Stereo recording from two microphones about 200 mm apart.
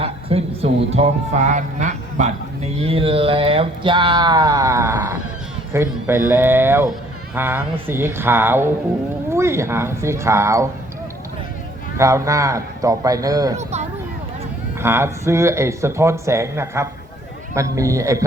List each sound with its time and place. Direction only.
0.0 s speech: 30° right (ahead or behind)
11.9 s speech: 15° right (ahead or behind)
13.6 s speech: 35° right (ahead or behind)
14.8 s speech: 10° right (ahead or behind)